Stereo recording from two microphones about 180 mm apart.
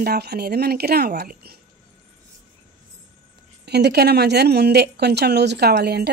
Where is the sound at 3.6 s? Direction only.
65° right (ahead or behind).